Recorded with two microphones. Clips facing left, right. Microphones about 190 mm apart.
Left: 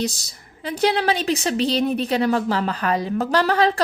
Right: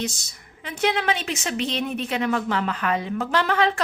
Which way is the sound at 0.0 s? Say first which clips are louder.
Left 4 dB; 35° left (ahead or behind).